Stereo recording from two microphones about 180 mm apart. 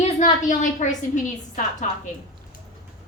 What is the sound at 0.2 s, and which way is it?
A woman's voice, 45° left (ahead or behind).